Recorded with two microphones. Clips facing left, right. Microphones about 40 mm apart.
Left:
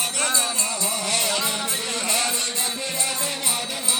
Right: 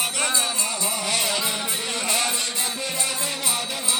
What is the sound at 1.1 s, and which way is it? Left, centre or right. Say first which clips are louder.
Music: even; right.